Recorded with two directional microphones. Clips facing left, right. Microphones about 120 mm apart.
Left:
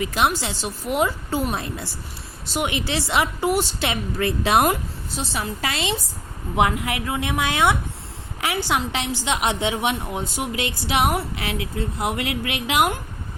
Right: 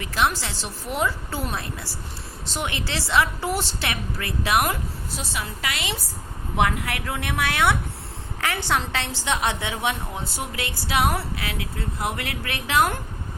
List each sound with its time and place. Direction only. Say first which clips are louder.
0.0 s a woman's voice: left 2 dB; 15° left (ahead or behind)
6.6 s a woman's voice: left 3 dB; 15° left (ahead or behind)